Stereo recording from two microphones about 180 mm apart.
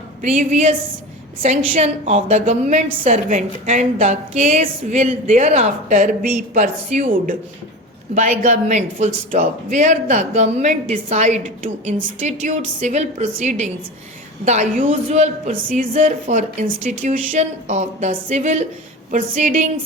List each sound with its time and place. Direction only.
0.2 s a woman's voice: 40° right (ahead or behind)